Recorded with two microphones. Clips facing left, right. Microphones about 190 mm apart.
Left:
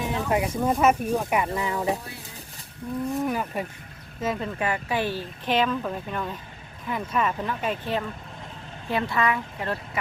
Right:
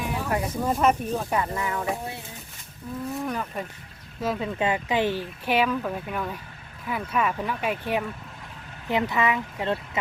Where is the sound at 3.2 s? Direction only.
10° left (ahead or behind).